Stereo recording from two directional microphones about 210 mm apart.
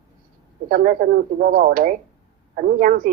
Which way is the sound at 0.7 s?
45° right (ahead or behind).